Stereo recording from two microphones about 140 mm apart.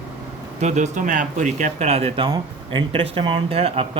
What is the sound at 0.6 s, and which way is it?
Speech, 55° right (ahead or behind).